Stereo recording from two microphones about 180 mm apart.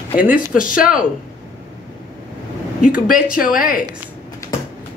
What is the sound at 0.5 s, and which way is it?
Speech, 50° left (ahead or behind).